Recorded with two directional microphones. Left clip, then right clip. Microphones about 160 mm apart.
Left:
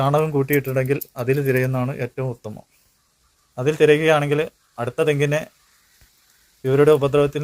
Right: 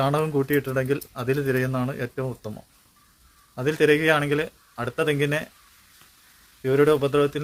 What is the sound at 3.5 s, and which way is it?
Speech, centre (ahead or behind).